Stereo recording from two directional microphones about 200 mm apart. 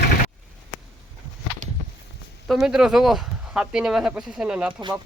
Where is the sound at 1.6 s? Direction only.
35° right (ahead or behind).